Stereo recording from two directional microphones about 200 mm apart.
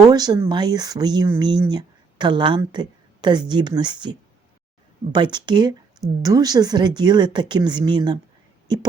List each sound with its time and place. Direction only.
0.1 s speech: 20° right (ahead or behind)